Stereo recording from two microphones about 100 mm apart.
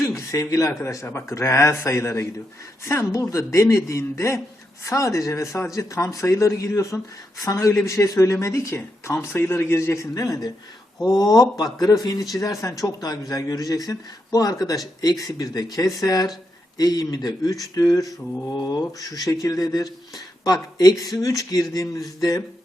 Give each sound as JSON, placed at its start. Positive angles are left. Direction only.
{"t": 0.0, "sound": "speech", "side_deg": 30}